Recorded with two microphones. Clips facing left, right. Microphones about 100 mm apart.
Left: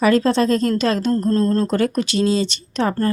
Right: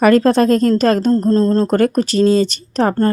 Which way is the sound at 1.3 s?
30° right (ahead or behind).